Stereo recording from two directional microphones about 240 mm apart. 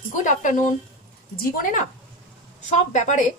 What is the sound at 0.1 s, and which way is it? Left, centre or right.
A woman's voice, left.